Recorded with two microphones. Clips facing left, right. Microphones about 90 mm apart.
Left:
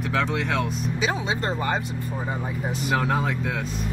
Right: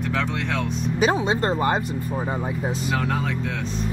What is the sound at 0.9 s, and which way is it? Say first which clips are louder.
Speech: right 7 dB; 45° right (ahead or behind).